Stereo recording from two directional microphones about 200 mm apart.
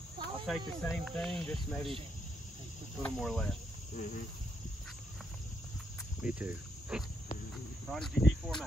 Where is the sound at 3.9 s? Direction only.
40° left (ahead or behind).